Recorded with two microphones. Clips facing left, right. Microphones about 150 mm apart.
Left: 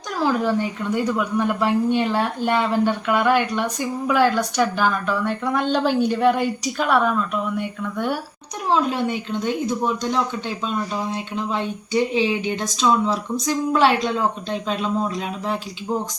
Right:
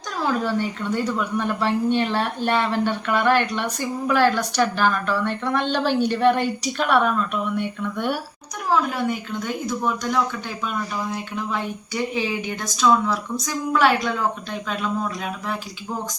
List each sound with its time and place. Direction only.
0.4 s a woman's voice: 15° left (ahead or behind)
8.7 s speech: 25° left (ahead or behind)